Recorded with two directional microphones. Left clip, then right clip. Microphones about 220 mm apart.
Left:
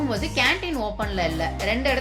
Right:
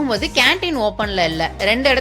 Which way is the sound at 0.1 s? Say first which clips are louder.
Right 8 dB; 55° right (ahead or behind).